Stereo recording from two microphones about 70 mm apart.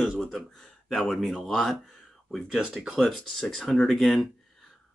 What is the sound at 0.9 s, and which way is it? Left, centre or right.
Speech, centre.